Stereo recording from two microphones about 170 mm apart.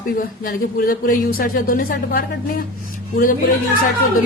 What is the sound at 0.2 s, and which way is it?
Speech, 60° left (ahead or behind).